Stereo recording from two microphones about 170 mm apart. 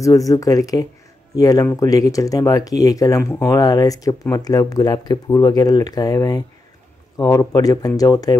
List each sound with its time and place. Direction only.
0.0 s speech: 20° left (ahead or behind)